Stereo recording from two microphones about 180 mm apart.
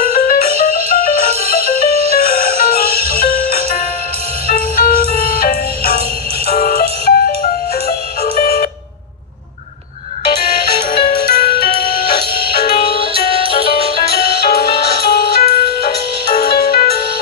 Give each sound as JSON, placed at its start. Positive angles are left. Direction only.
{"t": 0.0, "sound": "music", "side_deg": 55}
{"t": 8.2, "sound": "music", "side_deg": 55}
{"t": 10.2, "sound": "music", "side_deg": 60}
{"t": 14.0, "sound": "music", "side_deg": 60}